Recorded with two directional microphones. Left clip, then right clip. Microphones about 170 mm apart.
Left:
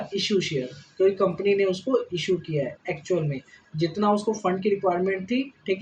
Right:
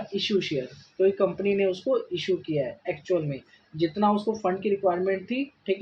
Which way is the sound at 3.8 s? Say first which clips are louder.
Left 1 dB; 30° right (ahead or behind).